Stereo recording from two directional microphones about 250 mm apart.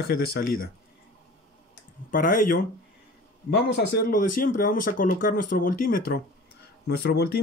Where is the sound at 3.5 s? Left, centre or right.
Left.